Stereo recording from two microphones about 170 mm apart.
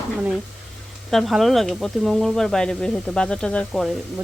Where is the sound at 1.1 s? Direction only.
Centre (ahead or behind).